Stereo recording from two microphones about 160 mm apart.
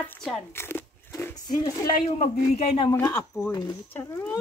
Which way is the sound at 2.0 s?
45° left (ahead or behind).